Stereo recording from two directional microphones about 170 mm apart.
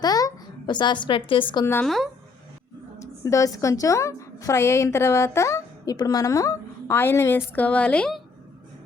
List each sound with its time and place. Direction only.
0.0 s a woman's voice: 20° left (ahead or behind)
1.6 s speech: 15° left (ahead or behind)
3.0 s a woman's voice: 20° left (ahead or behind)